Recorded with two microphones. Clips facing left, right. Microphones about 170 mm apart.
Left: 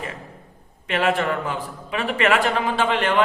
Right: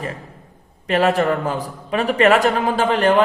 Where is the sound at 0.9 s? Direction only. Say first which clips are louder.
Right 5 dB; 40° right (ahead or behind).